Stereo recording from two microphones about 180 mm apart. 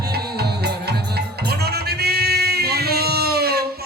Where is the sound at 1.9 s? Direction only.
65° right (ahead or behind).